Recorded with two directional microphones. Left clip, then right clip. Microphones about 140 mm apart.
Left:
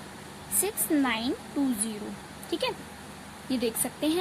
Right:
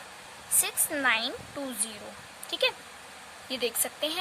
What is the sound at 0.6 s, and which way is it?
Speech, 45° right (ahead or behind).